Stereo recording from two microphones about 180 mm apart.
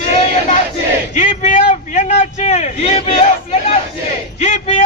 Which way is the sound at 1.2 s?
40° left (ahead or behind).